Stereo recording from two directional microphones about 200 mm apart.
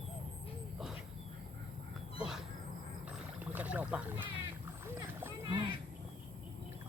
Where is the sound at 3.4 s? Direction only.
10° right (ahead or behind).